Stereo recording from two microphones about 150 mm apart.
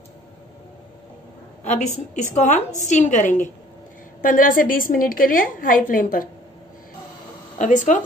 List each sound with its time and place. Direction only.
1.6 s a woman's voice: 50° left (ahead or behind); by 6.2 s 70° left (ahead or behind)
7.5 s speech: 55° left (ahead or behind)